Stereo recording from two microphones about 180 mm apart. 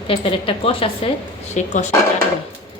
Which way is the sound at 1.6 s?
40° left (ahead or behind).